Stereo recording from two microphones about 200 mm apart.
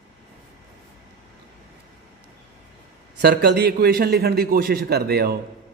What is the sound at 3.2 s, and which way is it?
A man's voice, 55° right (ahead or behind).